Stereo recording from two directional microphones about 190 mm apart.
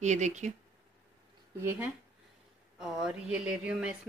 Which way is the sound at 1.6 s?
15° right (ahead or behind).